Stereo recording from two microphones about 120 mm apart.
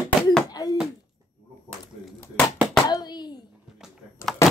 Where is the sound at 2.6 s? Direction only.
35° left (ahead or behind).